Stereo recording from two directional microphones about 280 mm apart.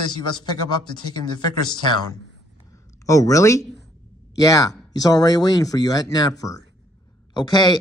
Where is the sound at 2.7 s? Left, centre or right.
Centre.